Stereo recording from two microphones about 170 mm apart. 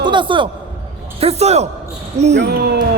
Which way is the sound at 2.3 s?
75° right (ahead or behind).